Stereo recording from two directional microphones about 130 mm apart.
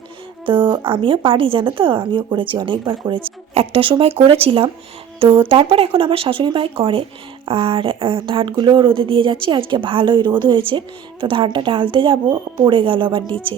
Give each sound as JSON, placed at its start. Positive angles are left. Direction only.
{"t": 0.4, "sound": "a woman's voice", "side_deg": -40}